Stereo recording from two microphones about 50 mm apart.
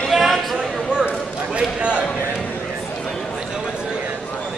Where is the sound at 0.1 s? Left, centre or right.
Centre.